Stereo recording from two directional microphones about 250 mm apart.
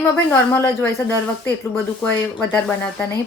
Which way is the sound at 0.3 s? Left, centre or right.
Centre.